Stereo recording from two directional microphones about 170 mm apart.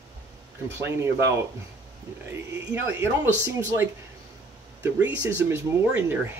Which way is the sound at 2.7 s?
15° right (ahead or behind).